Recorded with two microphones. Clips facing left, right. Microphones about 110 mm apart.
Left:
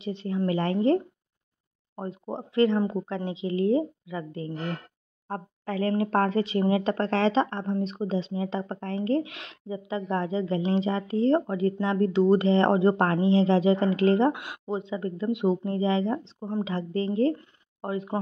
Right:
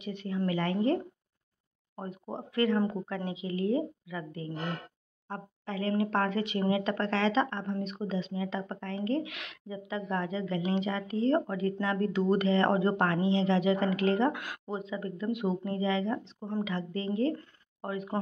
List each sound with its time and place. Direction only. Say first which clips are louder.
0.0 s a woman's voice: left 4 dB; 30° left (ahead or behind)
2.0 s a woman's voice: left 5 dB; 25° left (ahead or behind)
5.3 s speech: left 6 dB; 40° left (ahead or behind); by 18.2 s 25° left (ahead or behind)